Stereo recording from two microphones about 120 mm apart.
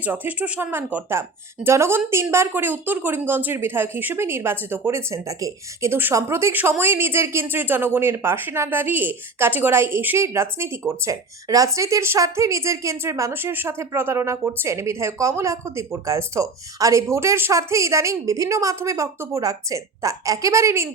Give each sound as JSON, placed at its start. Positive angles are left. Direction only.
{"t": 0.0, "sound": "speech", "side_deg": -15}